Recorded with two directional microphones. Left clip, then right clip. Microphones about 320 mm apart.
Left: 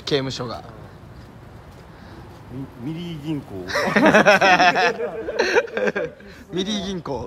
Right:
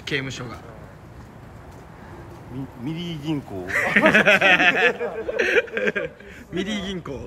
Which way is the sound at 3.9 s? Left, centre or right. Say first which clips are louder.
Left 1 dB; left.